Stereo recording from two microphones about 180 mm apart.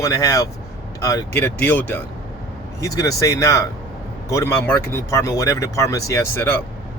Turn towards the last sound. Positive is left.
turn(degrees=15)  # may be behind; listen again after turning